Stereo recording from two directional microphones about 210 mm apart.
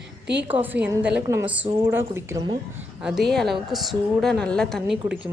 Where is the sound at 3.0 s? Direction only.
Centre (ahead or behind).